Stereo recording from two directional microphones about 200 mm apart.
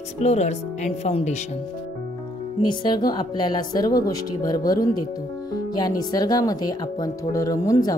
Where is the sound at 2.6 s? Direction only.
20° left (ahead or behind).